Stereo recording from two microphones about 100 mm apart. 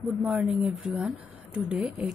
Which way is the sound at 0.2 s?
10° right (ahead or behind).